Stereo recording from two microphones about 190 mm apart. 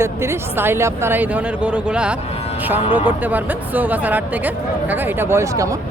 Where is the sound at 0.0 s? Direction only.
15° right (ahead or behind).